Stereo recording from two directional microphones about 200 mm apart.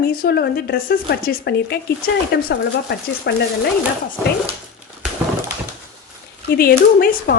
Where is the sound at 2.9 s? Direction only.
55° left (ahead or behind).